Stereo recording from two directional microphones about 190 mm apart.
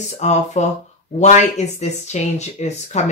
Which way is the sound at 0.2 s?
35° left (ahead or behind).